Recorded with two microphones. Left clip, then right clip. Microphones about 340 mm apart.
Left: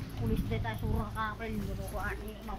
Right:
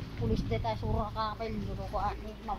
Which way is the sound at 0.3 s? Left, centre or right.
Centre.